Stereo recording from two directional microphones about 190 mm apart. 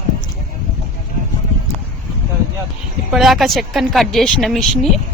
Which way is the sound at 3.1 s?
Centre (ahead or behind).